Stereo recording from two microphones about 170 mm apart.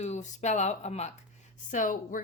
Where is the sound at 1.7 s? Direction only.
50° left (ahead or behind).